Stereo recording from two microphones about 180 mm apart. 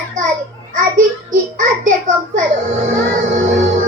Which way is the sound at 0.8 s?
50° right (ahead or behind).